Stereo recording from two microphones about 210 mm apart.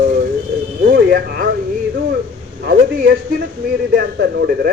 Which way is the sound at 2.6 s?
45° right (ahead or behind).